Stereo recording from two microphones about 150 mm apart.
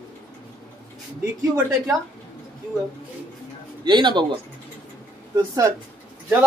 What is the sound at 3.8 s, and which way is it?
Speech, 30° right (ahead or behind).